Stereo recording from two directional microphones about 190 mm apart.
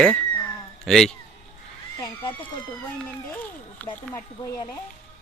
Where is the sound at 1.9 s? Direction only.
20° left (ahead or behind).